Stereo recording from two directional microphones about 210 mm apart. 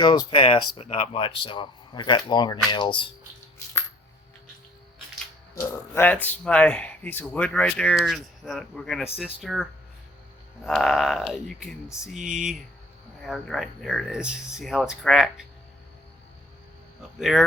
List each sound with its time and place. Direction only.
0.3 s speech: 25° left (ahead or behind)
5.5 s speech: 10° left (ahead or behind)
10.7 s speech: centre (ahead or behind)
17.2 s speech: centre (ahead or behind)